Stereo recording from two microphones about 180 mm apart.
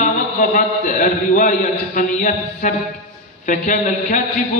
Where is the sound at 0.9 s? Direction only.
45° left (ahead or behind).